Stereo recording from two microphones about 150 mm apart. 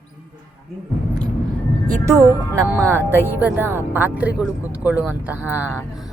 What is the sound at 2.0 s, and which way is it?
Speech, 20° right (ahead or behind).